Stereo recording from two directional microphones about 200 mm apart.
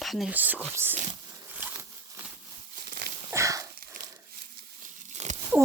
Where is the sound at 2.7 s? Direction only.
50° right (ahead or behind).